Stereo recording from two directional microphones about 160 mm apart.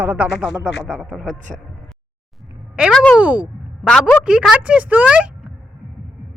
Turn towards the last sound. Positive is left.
turn(degrees=-5)  # may be behind; listen again after turning